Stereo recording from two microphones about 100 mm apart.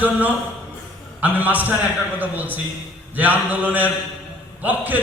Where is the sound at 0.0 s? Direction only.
15° right (ahead or behind).